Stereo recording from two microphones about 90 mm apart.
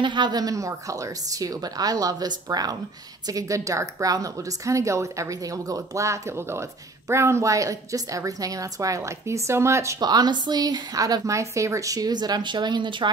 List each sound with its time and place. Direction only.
0.0 s a woman's voice: 55° right (ahead or behind); by 9.9 s 30° right (ahead or behind)
9.9 s a woman's voice: 50° right (ahead or behind)